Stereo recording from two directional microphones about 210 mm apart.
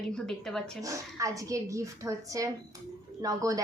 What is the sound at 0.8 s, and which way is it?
A woman's voice, 15° right (ahead or behind).